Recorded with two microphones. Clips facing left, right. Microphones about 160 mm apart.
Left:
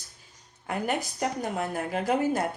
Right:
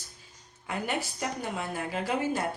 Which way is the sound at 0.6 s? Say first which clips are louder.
Left 3 dB; 45° left (ahead or behind).